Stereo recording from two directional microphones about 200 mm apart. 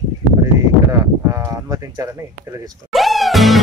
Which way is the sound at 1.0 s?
15° right (ahead or behind).